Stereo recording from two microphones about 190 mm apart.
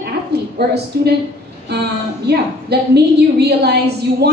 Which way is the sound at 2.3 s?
60° right (ahead or behind).